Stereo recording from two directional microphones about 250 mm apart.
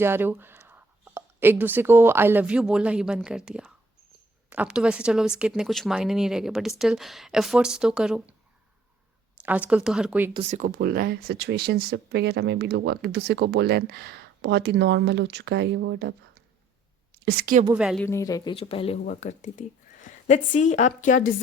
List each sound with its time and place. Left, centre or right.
0.0 s speech: centre
9.4 s speech: centre
10.3 s speech: right
17.2 s speech: right
17.7 s speech: centre
18.0 s speech: centre; by 21.3 s left